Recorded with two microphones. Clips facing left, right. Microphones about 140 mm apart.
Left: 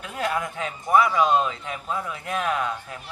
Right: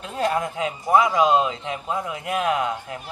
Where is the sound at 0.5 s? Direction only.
15° right (ahead or behind).